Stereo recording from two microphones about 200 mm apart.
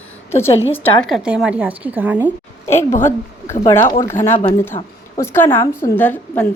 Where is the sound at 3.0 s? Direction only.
10° left (ahead or behind).